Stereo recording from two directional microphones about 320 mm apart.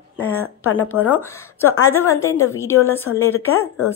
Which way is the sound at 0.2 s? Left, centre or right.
Centre.